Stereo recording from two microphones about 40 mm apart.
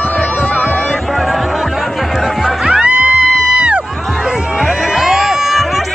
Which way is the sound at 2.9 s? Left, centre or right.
Right.